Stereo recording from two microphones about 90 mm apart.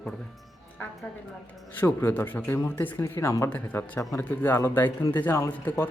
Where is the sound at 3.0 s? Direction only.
40° left (ahead or behind).